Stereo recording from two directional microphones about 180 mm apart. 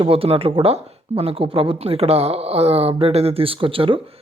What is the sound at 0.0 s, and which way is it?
Speech, 30° right (ahead or behind).